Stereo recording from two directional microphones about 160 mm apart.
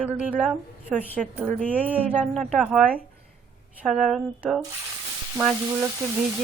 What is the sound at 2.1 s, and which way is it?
Speech, 5° left (ahead or behind).